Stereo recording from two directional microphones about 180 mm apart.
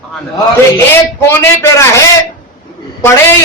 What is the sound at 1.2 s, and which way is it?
Speech, 15° left (ahead or behind).